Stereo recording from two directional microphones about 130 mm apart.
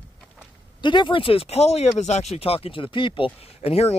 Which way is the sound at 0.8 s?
40° left (ahead or behind).